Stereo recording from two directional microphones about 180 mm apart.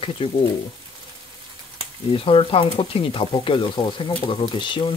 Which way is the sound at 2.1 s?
30° left (ahead or behind).